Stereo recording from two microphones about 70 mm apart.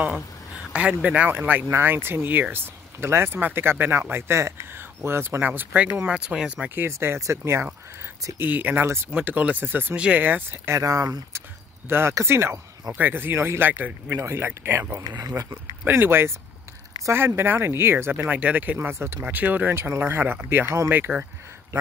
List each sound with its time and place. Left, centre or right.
0.7 s speech: centre
1.7 s speech: right
6.0 s speech: centre
6.7 s speech: right
8.4 s speech: right
9.9 s speech: centre
10.2 s speech: right
10.7 s speech: right
12.1 s speech: right
15.0 s speech: right
15.8 s speech: right
18.8 s speech: right